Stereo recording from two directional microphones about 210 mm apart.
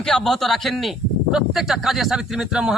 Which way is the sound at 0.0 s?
Centre (ahead or behind).